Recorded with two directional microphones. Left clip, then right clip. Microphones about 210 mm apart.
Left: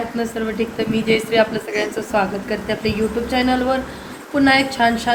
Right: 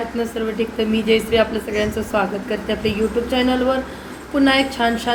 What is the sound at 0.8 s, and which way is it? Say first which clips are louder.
A woman's voice: right 1 dB; 10° left (ahead or behind).